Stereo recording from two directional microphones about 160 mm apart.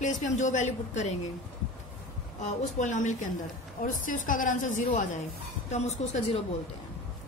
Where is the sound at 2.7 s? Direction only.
50° left (ahead or behind).